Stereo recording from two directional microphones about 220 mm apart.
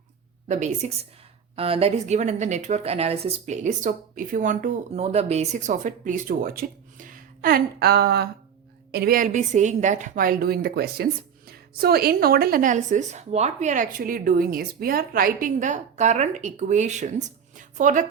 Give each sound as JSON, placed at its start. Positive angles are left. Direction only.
{"t": 0.4, "sound": "a woman's voice", "side_deg": -30}